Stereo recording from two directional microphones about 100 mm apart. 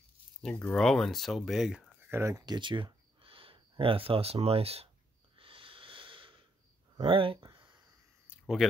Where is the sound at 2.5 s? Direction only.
50° right (ahead or behind); by 4.9 s 90° right.